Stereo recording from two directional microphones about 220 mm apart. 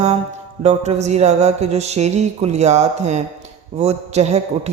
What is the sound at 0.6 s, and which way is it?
Mantra, 30° right (ahead or behind).